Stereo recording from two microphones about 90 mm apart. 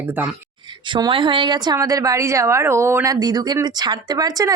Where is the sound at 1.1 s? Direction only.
65° right (ahead or behind); by 3.1 s 30° right (ahead or behind).